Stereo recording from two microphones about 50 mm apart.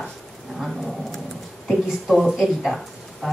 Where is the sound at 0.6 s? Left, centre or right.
Centre.